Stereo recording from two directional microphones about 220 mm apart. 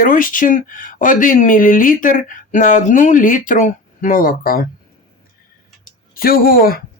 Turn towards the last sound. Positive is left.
turn(degrees=40)  # may be behind; listen again after turning